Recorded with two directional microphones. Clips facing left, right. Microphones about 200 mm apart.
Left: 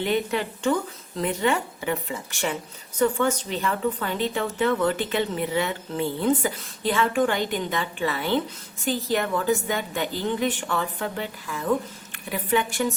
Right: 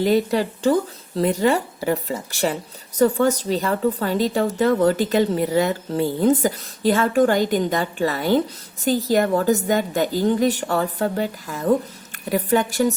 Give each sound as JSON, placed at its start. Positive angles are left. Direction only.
{"t": 0.0, "sound": "speech", "side_deg": -35}